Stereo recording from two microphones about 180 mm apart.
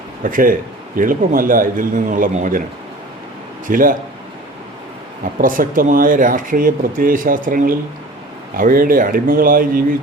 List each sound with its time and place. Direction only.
0.2 s speech: 50° right (ahead or behind)
3.7 s speech: 50° right (ahead or behind)
5.2 s speech: 50° right (ahead or behind)